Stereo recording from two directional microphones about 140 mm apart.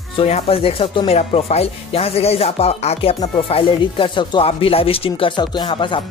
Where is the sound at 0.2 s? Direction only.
45° left (ahead or behind).